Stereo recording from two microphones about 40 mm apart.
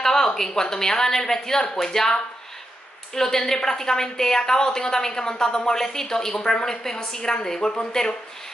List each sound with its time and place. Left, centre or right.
0.0 s a woman's voice: centre